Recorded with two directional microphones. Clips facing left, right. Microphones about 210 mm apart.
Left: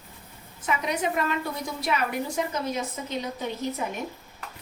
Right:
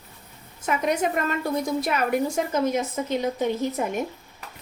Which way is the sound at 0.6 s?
45° right (ahead or behind).